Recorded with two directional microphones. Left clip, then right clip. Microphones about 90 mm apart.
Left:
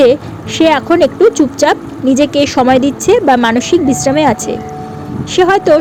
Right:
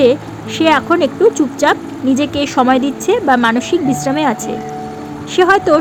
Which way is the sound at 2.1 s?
40° left (ahead or behind).